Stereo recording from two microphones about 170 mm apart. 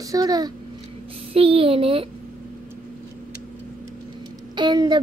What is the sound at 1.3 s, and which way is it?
Speech, 35° right (ahead or behind).